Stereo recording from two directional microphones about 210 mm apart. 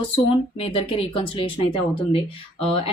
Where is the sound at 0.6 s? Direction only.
25° left (ahead or behind).